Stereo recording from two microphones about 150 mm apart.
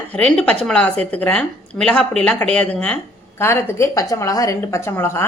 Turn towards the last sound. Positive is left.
turn(degrees=15)  # may be behind; listen again after turning